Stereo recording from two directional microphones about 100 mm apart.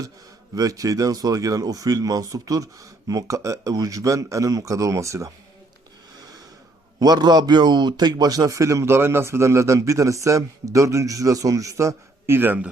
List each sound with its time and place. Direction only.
0.5 s a man's voice: 35° right (ahead or behind)
7.0 s a man's voice: 40° right (ahead or behind); by 12.7 s 15° right (ahead or behind)